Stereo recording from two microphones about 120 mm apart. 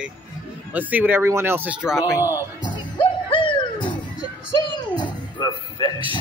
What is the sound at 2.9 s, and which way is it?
Music, 45° left (ahead or behind).